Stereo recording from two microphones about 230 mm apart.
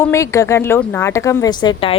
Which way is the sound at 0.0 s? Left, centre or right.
Centre.